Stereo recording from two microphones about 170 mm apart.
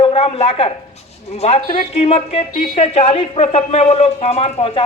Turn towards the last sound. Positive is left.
turn(degrees=35)  # may be behind; listen again after turning